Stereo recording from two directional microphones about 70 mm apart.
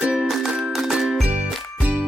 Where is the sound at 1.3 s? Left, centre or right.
Centre.